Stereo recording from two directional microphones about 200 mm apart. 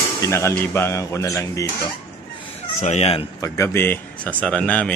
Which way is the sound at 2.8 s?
35° left (ahead or behind).